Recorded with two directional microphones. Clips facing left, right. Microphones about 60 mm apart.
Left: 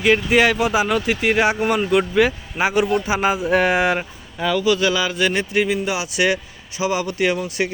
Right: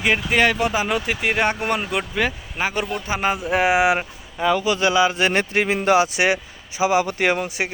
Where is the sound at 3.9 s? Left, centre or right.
Right.